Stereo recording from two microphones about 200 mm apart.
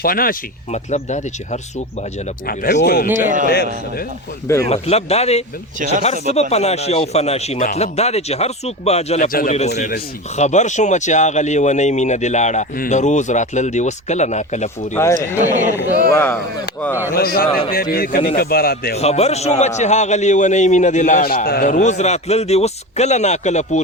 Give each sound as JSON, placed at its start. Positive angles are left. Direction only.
{"t": 0.0, "sound": "a man's voice", "side_deg": 45}
{"t": 2.5, "sound": "a man's voice", "side_deg": 50}
{"t": 3.1, "sound": "speech", "side_deg": -40}
{"t": 3.5, "sound": "a man's voice", "side_deg": 50}
{"t": 4.7, "sound": "a man's voice", "side_deg": 30}
{"t": 9.6, "sound": "a man's voice", "side_deg": 35}
{"t": 15.0, "sound": "speech", "side_deg": 10}
{"t": 16.1, "sound": "speech", "side_deg": 10}
{"t": 17.2, "sound": "a man's voice", "side_deg": 50}
{"t": 18.9, "sound": "a man's voice", "side_deg": 30}